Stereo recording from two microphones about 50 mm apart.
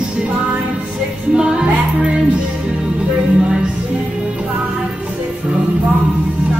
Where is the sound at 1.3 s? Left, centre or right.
Centre.